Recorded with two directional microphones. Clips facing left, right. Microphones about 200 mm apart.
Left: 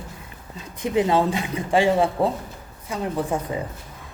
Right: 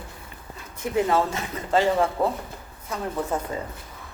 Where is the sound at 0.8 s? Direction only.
15° left (ahead or behind).